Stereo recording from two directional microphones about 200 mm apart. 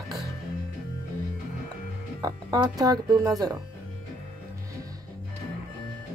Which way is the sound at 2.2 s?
20° right (ahead or behind).